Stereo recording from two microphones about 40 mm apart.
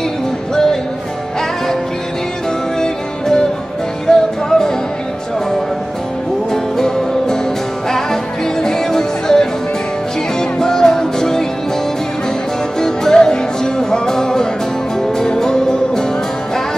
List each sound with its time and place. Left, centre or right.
2.8 s music: centre
6.5 s music: centre
8.6 s music: centre
10.6 s music: centre
12.8 s music: centre